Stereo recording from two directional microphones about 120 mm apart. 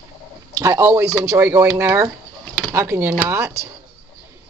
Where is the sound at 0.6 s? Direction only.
25° right (ahead or behind).